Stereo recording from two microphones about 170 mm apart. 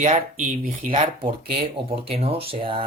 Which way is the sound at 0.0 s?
45° right (ahead or behind).